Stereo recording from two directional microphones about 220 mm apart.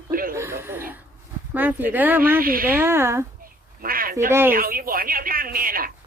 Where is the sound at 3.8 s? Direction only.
40° right (ahead or behind).